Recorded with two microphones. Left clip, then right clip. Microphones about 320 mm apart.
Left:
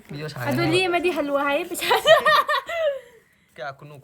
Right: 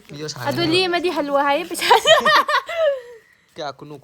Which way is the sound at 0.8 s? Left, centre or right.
Right.